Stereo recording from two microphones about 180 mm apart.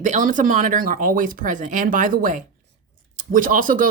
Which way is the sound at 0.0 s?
45° right (ahead or behind).